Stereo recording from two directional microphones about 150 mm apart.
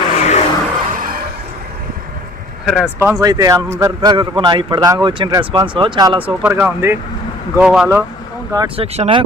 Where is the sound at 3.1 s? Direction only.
25° right (ahead or behind).